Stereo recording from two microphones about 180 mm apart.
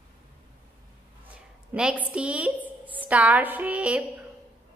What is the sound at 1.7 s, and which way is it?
A woman's voice, 5° right (ahead or behind).